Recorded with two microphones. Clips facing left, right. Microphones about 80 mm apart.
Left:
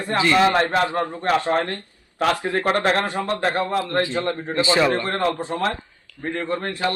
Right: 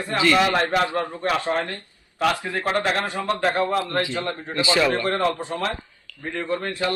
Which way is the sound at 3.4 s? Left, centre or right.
Left.